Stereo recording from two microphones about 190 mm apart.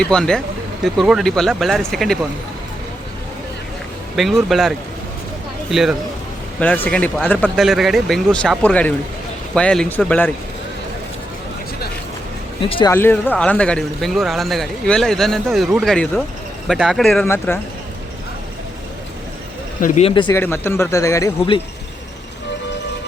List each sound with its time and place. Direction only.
0.0 s speech: 5° left (ahead or behind)
4.1 s speech: centre (ahead or behind)
5.7 s speech: centre (ahead or behind)
6.8 s speech: 10° left (ahead or behind)
12.6 s speech: 30° left (ahead or behind)
12.9 s speech: 10° left (ahead or behind)
17.2 s speech: 10° left (ahead or behind)
19.8 s speech: 30° left (ahead or behind)
20.3 s speech: 10° left (ahead or behind)